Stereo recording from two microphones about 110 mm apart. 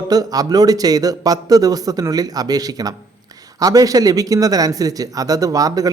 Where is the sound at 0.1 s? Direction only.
35° right (ahead or behind).